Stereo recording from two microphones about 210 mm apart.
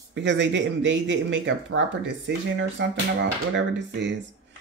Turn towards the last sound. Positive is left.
turn(degrees=-55)  # may be behind; listen again after turning